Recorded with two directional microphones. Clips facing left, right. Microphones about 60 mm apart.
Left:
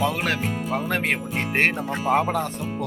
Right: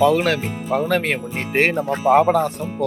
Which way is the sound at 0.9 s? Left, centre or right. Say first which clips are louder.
Right 4 dB; centre.